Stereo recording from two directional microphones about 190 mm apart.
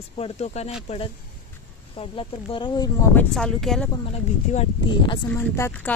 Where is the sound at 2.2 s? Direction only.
25° left (ahead or behind).